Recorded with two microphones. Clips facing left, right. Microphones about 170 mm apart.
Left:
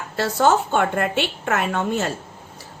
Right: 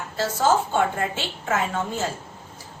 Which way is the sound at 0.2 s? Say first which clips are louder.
Left 3 dB; 65° left (ahead or behind).